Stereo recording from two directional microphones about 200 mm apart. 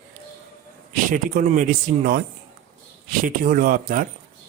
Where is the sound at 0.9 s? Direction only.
40° right (ahead or behind).